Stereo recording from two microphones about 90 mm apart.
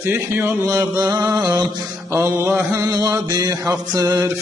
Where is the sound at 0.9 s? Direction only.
50° right (ahead or behind).